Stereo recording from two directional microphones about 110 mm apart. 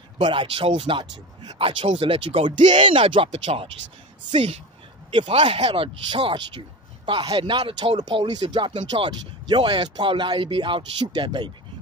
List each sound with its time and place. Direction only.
0.2 s speech: 50° right (ahead or behind)
3.3 s speech: 75° right (ahead or behind)
5.3 s speech: 60° right (ahead or behind); by 11.5 s 40° right (ahead or behind)